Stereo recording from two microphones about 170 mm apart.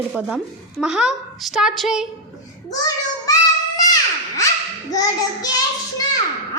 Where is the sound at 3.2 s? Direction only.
20° left (ahead or behind).